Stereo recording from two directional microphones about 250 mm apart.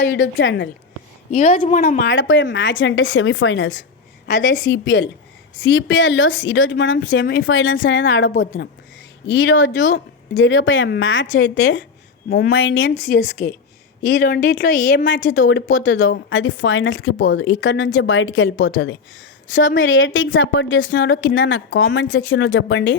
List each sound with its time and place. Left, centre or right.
0.0 s speech: left
1.3 s speech: left
2.1 s speech: left
13.1 s speech: left
14.0 s speech: left